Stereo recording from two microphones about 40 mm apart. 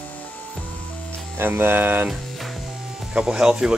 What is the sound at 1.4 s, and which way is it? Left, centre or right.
Speech, right.